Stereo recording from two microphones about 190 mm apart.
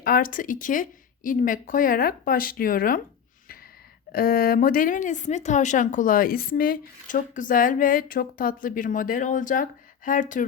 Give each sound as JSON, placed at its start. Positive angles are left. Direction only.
{"t": 0.0, "sound": "a woman's voice", "side_deg": 50}
{"t": 4.1, "sound": "a woman's voice", "side_deg": 50}